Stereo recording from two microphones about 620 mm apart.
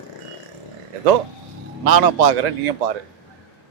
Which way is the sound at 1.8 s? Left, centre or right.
Right.